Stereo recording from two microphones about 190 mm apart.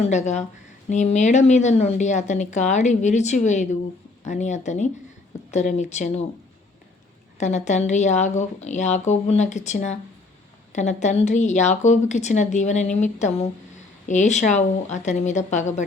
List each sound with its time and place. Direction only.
0.1 s speech: 35° left (ahead or behind)
7.3 s speech: 40° left (ahead or behind)